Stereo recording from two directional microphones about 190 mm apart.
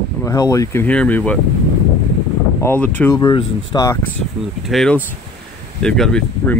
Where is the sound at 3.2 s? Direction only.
25° left (ahead or behind).